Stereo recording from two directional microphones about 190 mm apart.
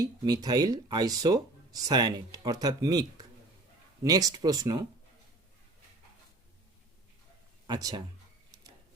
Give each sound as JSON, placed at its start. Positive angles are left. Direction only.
{"t": 0.0, "sound": "speech", "side_deg": -20}
{"t": 7.7, "sound": "speech", "side_deg": -20}